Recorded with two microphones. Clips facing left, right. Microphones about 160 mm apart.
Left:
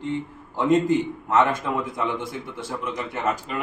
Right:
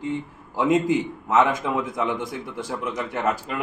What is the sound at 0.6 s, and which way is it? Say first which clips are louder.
Speech: left 1 dB; 10° right (ahead or behind).